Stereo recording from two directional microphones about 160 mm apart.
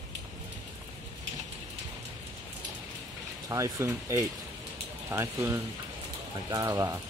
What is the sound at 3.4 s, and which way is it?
Speech, 20° right (ahead or behind).